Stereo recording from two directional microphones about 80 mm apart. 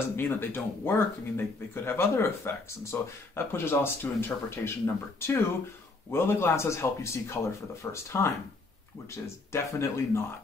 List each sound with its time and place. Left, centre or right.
0.1 s speech: left